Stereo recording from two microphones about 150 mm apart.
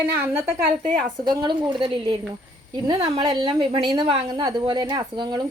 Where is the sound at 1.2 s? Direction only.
30° right (ahead or behind).